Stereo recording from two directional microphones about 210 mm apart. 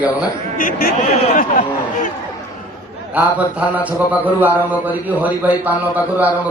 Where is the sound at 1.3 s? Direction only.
40° left (ahead or behind).